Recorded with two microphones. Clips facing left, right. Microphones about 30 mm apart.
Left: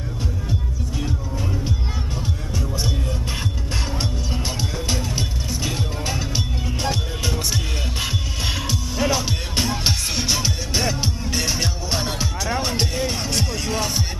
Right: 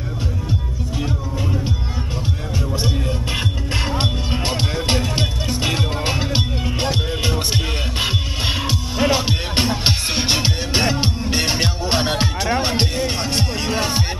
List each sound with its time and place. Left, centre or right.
0.9 s music: right
2.7 s music: right